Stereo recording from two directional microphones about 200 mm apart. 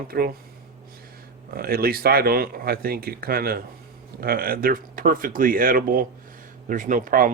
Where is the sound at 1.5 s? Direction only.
50° right (ahead or behind).